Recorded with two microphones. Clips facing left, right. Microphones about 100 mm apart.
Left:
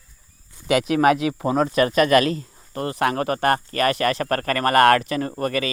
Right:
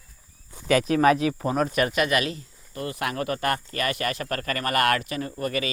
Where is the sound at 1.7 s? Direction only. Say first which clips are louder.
Left 6 dB; 40° left (ahead or behind).